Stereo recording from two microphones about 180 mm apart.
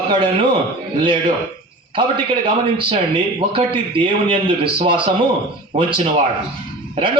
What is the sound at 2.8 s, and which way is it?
A man's voice, 30° right (ahead or behind).